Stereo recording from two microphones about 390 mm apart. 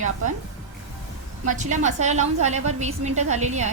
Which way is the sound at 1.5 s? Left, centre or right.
Centre.